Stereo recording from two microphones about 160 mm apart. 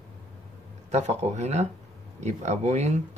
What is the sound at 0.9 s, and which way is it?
Speech, 45° right (ahead or behind).